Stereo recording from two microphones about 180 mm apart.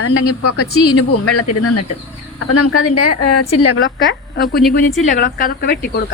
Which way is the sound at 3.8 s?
65° left (ahead or behind).